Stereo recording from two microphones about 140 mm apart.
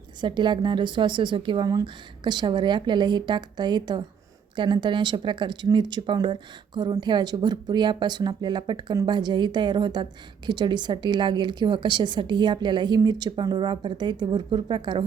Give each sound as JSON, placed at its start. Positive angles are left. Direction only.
{"t": 0.2, "sound": "speech", "side_deg": -35}